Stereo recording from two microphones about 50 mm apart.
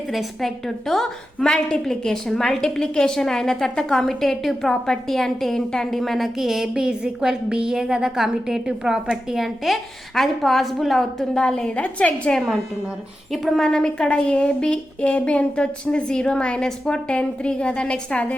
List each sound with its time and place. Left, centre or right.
0.1 s a woman's voice: centre
11.8 s a woman's voice: left
13.6 s a woman's voice: centre